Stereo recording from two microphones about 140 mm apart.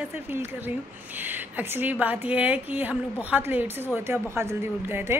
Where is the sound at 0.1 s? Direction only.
15° right (ahead or behind).